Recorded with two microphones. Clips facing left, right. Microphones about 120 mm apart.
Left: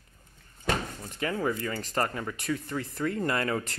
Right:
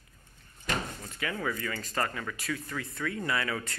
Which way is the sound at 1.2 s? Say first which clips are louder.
Left 4 dB; 30° left (ahead or behind).